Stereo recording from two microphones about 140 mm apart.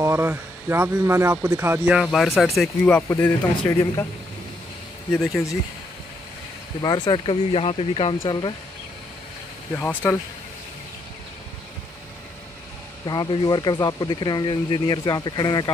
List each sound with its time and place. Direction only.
0.0 s speech: 15° right (ahead or behind)
1.9 s speech: centre (ahead or behind)
2.9 s speech: 15° left (ahead or behind)
5.1 s speech: 5° left (ahead or behind)
6.8 s speech: 30° left (ahead or behind)
8.3 s speech: 30° left (ahead or behind)
9.8 s speech: 15° left (ahead or behind)
13.0 s speech: 30° left (ahead or behind)